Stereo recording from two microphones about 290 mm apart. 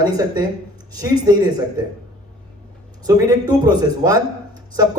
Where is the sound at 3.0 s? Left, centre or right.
Centre.